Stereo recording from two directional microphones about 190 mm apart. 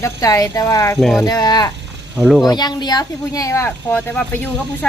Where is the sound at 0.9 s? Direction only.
Centre (ahead or behind).